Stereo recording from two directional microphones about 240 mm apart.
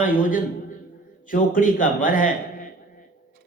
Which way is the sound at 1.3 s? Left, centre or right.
Left.